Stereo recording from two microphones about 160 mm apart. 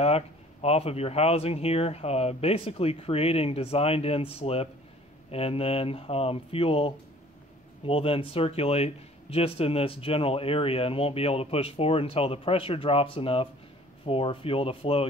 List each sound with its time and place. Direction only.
0.0 s speech: 40° left (ahead or behind)